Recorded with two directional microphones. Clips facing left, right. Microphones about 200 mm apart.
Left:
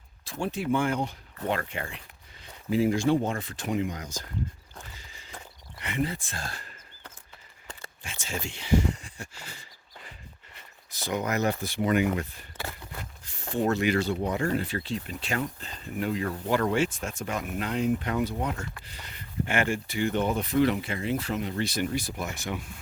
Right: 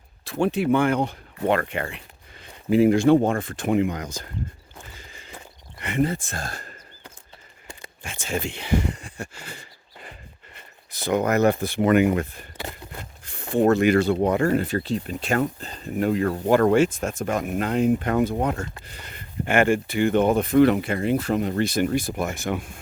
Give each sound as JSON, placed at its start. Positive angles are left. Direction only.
{"t": 0.3, "sound": "speech", "side_deg": -65}
{"t": 4.9, "sound": "horse", "side_deg": -55}
{"t": 5.8, "sound": "speech", "side_deg": -50}
{"t": 8.0, "sound": "a sound", "side_deg": -55}
{"t": 12.1, "sound": "speech", "side_deg": -55}